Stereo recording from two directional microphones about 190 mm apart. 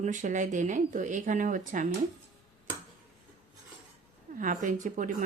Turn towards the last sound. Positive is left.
turn(degrees=-45)  # may be behind; listen again after turning